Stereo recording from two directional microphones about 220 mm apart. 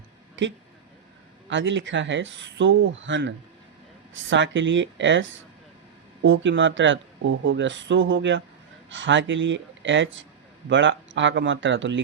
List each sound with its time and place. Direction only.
1.5 s speech: 55° right (ahead or behind)